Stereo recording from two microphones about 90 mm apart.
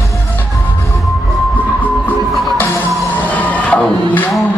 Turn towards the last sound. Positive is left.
turn(degrees=15)  # may be behind; listen again after turning